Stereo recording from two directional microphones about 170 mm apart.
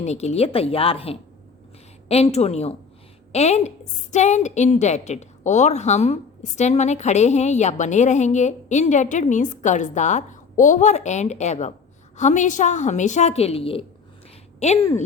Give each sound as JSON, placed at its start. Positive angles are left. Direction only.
{"t": 0.0, "sound": "a woman's voice", "side_deg": 40}